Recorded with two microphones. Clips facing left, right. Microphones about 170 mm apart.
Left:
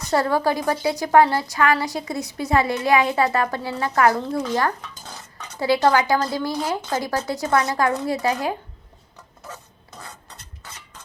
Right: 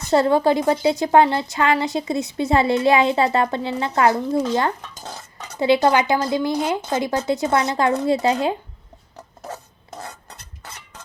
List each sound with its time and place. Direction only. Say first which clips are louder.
0.0 s a woman's voice: right 4 dB; 25° right (ahead or behind)